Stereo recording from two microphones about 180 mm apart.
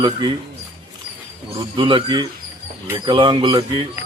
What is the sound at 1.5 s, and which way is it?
Speech, 25° right (ahead or behind).